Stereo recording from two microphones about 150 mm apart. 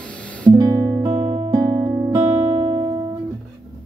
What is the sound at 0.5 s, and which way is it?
Music, 20° right (ahead or behind).